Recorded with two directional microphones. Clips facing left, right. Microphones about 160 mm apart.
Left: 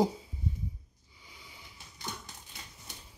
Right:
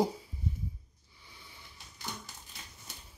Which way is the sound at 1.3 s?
15° left (ahead or behind).